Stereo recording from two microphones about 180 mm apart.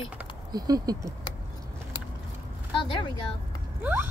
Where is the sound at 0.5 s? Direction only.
20° right (ahead or behind).